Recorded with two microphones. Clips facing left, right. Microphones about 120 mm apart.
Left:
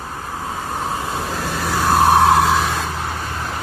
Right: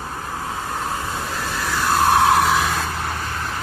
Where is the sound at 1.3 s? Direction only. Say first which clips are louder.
Left 3 dB; 50° left (ahead or behind).